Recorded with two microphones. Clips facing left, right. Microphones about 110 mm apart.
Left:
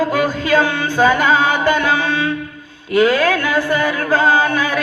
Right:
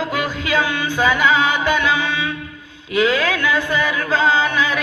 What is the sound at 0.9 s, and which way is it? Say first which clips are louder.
Music: left 3 dB; 15° right (ahead or behind).